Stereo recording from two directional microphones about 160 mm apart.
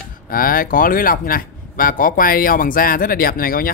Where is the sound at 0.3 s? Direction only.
65° left (ahead or behind).